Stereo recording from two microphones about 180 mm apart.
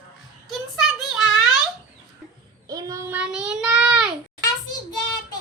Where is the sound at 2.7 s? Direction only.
20° right (ahead or behind).